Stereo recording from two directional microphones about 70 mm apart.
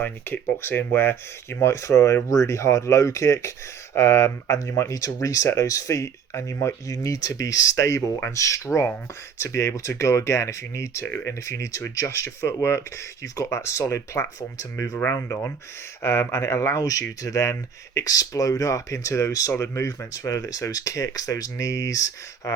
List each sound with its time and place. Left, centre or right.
0.0 s speech: left
15.1 s speech: left